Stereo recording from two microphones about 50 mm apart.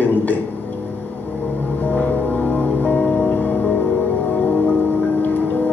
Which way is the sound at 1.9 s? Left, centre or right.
Left.